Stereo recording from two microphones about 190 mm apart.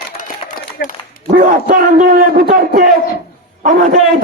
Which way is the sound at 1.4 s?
45° right (ahead or behind).